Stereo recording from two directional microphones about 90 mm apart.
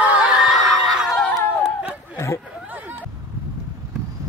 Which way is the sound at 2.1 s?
30° left (ahead or behind).